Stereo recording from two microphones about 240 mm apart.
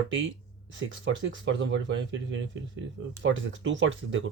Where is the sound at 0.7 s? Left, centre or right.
Right.